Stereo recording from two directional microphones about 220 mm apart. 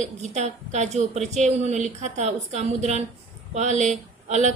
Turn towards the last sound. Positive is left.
turn(degrees=-30)  # may be behind; listen again after turning